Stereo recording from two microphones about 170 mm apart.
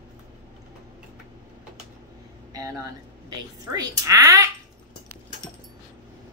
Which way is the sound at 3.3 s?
20° right (ahead or behind).